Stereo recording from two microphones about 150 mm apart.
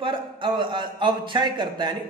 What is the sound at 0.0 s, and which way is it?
A man's voice, 30° right (ahead or behind).